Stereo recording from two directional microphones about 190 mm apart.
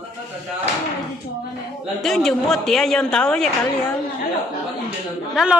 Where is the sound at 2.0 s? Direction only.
Centre (ahead or behind).